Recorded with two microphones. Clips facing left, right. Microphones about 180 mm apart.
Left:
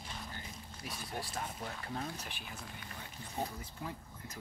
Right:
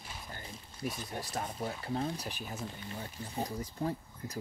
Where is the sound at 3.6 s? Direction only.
40° right (ahead or behind).